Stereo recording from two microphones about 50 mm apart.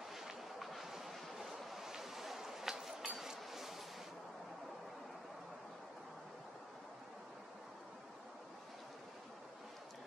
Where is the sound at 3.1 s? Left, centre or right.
Centre.